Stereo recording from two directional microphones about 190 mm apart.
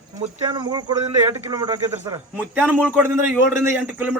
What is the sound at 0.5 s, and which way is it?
Speech, 25° right (ahead or behind).